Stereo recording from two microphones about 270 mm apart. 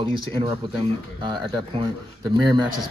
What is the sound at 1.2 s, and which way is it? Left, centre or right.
A man's voice, centre.